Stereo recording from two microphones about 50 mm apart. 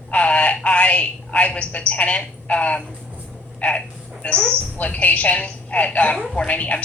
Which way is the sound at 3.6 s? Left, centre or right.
Left.